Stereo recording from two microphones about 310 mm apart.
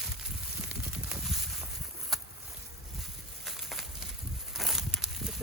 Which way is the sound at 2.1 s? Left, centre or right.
Centre.